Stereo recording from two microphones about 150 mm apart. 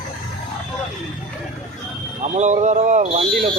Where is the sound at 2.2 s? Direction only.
50° right (ahead or behind).